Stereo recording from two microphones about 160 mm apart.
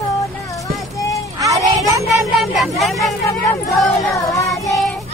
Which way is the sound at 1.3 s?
20° right (ahead or behind).